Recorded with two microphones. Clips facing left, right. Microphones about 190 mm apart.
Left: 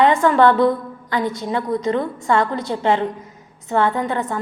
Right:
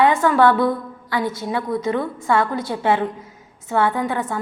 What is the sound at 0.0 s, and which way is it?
A woman's voice, centre (ahead or behind).